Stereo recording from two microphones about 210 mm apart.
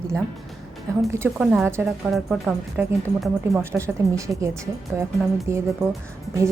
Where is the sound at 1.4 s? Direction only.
5° right (ahead or behind).